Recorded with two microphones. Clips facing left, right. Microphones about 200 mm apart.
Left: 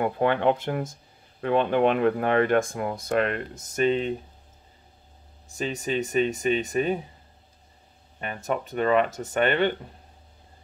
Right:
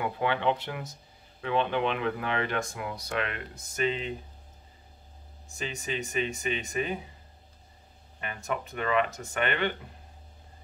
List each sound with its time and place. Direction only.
0.0 s speech: 50° left (ahead or behind)
5.6 s speech: 35° left (ahead or behind)
8.2 s speech: 35° left (ahead or behind)